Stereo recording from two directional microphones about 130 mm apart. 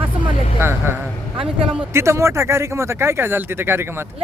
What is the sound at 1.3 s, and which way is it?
Speech, 45° right (ahead or behind).